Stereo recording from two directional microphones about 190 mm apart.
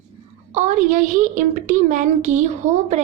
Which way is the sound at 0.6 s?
40° right (ahead or behind).